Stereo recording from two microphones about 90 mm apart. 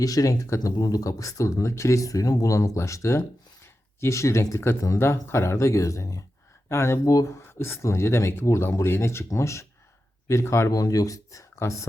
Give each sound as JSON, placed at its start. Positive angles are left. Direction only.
{"t": 0.0, "sound": "speech", "side_deg": 40}